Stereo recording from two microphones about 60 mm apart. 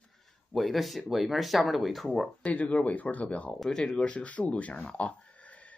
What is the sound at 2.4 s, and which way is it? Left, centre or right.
Speech, left.